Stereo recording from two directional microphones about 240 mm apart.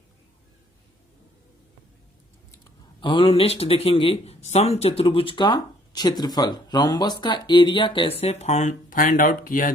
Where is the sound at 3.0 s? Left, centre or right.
Centre.